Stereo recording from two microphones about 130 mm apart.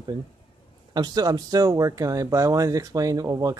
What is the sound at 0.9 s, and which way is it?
Speech, 30° right (ahead or behind).